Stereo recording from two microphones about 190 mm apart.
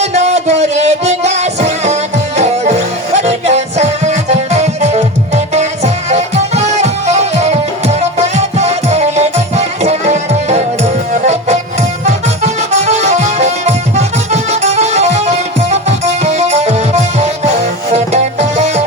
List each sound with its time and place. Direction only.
0.0 s music: 35° right (ahead or behind)